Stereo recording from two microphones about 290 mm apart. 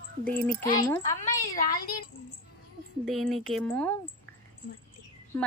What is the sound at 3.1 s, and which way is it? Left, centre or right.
Speech, centre.